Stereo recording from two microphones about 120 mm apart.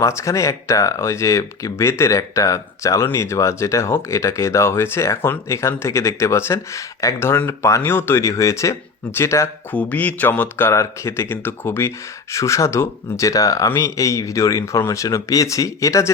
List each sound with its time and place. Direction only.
0.0 s speech: 25° left (ahead or behind)
9.7 s speech: 15° left (ahead or behind)